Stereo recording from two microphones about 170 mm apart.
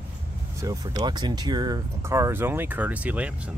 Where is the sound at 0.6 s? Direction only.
20° right (ahead or behind).